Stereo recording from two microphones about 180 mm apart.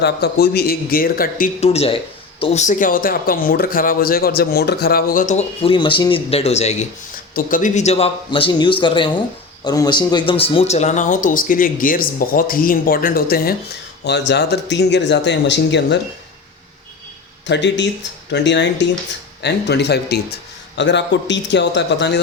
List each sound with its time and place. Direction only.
0.0 s a man's voice: 65° left (ahead or behind)
1.6 s speech: 35° left (ahead or behind)
5.7 s speech: 25° left (ahead or behind); by 13.5 s 55° left (ahead or behind)
14.0 s speech: 70° left (ahead or behind)
17.4 s speech: 80° left
20.7 s speech: 80° left